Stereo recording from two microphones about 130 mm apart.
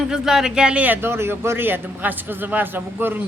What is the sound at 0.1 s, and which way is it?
A man's voice, 5° right (ahead or behind).